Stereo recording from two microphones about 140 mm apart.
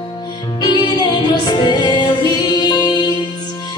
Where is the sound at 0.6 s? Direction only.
30° left (ahead or behind).